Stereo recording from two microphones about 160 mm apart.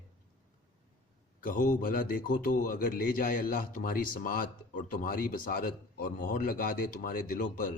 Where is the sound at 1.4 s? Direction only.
60° left (ahead or behind).